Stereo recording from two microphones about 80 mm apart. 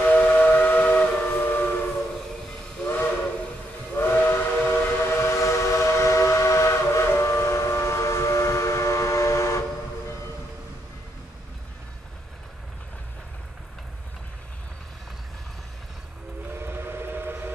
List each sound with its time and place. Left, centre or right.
0.0 s steam whistle: left
2.8 s steam whistle: left
16.5 s steam whistle: right